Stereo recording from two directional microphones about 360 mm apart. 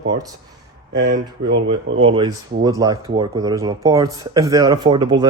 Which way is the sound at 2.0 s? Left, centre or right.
Centre.